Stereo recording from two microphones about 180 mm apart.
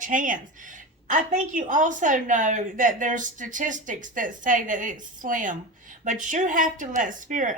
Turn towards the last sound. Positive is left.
turn(degrees=-45)  # may be behind; listen again after turning